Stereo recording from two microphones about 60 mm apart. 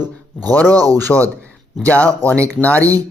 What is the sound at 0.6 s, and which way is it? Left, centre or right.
Speech, right.